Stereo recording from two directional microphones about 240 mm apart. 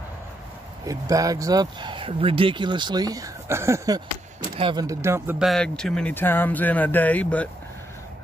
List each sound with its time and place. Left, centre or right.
0.8 s speech: centre